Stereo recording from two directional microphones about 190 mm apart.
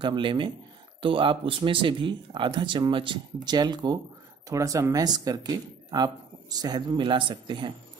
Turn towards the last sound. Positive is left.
turn(degrees=-25)  # may be behind; listen again after turning